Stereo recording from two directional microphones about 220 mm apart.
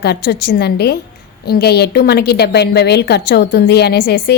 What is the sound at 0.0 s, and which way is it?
A woman's voice, 50° left (ahead or behind).